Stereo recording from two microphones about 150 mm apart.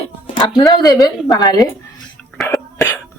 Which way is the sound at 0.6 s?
25° left (ahead or behind).